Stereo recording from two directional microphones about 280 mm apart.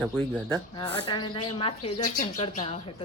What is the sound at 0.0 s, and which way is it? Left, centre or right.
Speech, centre.